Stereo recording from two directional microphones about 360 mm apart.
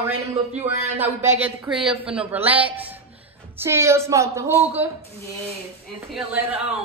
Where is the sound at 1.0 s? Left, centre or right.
Centre.